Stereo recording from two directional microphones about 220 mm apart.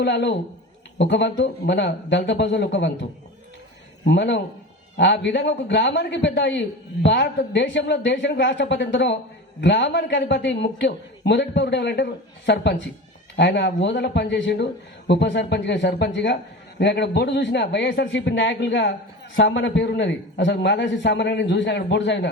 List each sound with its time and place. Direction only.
0.0 s a man's voice: 50° left (ahead or behind)